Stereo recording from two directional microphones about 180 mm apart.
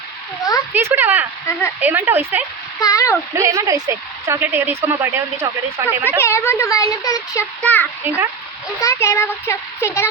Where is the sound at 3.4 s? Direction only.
15° right (ahead or behind).